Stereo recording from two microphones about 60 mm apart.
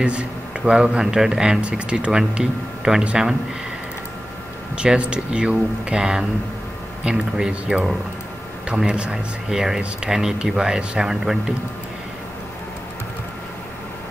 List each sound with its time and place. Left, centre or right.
0.0 s speech: centre
4.7 s speech: centre